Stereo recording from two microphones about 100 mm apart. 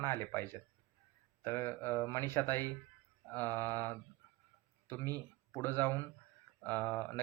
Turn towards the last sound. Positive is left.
turn(degrees=15)  # may be behind; listen again after turning